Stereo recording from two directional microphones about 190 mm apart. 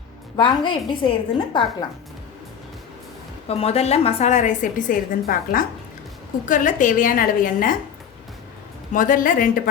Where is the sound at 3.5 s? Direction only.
30° left (ahead or behind).